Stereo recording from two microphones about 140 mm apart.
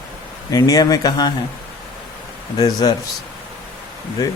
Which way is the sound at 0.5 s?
25° left (ahead or behind).